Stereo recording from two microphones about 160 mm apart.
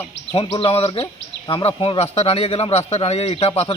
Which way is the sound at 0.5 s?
35° left (ahead or behind).